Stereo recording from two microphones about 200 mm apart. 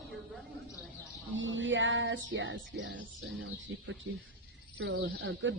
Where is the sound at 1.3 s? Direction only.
70° right (ahead or behind).